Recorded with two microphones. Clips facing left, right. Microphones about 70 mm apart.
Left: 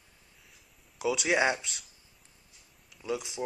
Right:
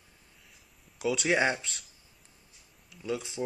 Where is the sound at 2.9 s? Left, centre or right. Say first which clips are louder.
Even; centre.